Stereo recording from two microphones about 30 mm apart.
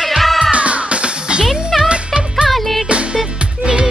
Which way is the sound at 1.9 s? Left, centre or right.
Right.